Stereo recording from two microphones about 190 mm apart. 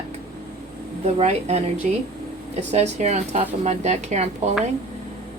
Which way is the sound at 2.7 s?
35° right (ahead or behind).